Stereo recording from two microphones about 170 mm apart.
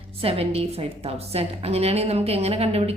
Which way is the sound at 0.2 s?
35° right (ahead or behind).